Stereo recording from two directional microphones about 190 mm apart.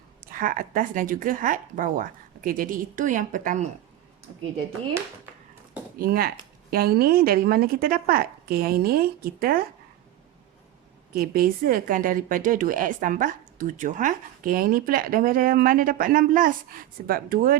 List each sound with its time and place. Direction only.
0.3 s a woman's voice: 45° right (ahead or behind)
6.0 s a woman's voice: 50° right (ahead or behind)
11.1 s a woman's voice: 50° right (ahead or behind)